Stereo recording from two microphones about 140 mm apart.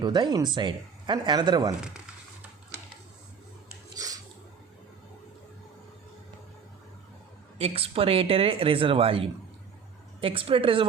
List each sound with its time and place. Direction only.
0.0 s speech: 30° right (ahead or behind)
3.9 s a sound: 25° right (ahead or behind)
7.6 s speech: 45° right (ahead or behind)